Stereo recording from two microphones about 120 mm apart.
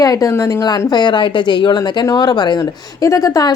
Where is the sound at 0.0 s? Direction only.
30° left (ahead or behind).